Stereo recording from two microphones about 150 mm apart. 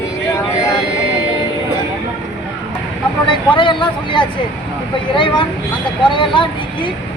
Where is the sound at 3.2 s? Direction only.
30° left (ahead or behind).